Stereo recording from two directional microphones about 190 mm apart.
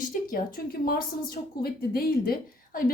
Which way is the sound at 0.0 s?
45° left (ahead or behind).